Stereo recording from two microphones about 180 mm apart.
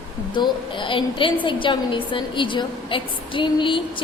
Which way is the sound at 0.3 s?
25° left (ahead or behind).